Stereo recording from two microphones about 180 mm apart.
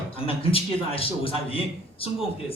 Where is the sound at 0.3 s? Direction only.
30° left (ahead or behind).